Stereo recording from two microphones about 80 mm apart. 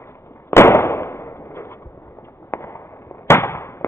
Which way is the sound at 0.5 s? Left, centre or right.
Left.